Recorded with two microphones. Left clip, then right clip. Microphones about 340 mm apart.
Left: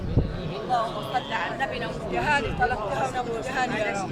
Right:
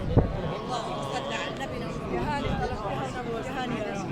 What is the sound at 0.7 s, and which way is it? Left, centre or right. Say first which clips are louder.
Speech: left 9 dB; left.